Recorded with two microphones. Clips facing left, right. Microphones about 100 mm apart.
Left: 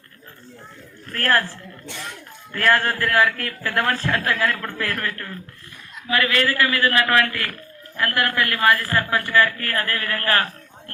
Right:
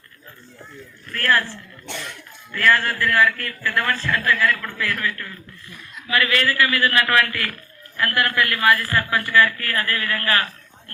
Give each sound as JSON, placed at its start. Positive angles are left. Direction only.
{"t": 1.1, "sound": "a man's voice", "side_deg": 45}
{"t": 6.1, "sound": "a man's voice", "side_deg": 20}
{"t": 6.6, "sound": "a man's voice", "side_deg": -5}